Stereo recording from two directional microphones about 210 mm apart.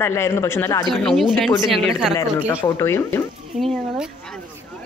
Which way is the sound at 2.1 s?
15° left (ahead or behind).